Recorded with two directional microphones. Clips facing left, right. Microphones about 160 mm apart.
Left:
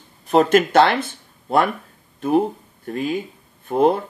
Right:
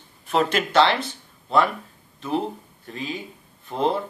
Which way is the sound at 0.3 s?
45° left (ahead or behind).